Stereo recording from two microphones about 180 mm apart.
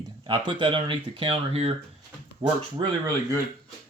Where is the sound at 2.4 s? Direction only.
20° right (ahead or behind).